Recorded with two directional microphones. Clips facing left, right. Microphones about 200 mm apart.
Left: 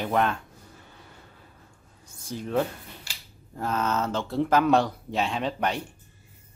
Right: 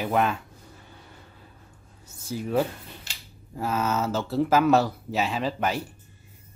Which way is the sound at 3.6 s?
5° right (ahead or behind).